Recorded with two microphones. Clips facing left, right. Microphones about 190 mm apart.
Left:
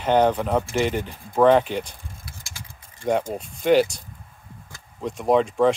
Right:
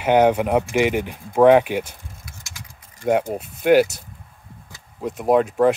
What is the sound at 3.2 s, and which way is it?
Speech, 10° right (ahead or behind).